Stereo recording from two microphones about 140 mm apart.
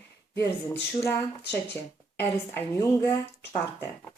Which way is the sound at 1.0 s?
20° left (ahead or behind).